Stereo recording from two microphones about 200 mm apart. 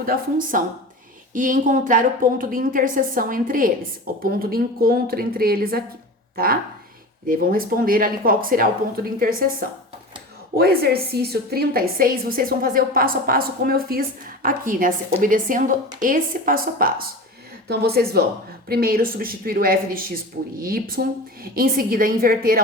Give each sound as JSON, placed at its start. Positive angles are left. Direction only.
{"t": 0.0, "sound": "a woman's voice", "side_deg": -45}